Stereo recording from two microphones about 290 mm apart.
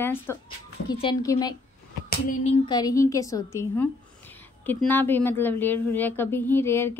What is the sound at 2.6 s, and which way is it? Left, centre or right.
A woman's voice, centre.